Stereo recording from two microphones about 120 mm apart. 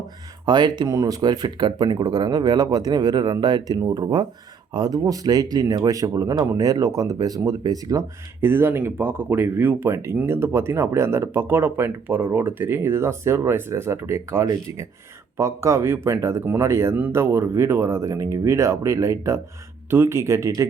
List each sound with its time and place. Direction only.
0.4 s speech: 35° right (ahead or behind)
8.4 s speech: 20° right (ahead or behind)